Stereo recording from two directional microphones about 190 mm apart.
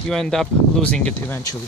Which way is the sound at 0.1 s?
Centre (ahead or behind).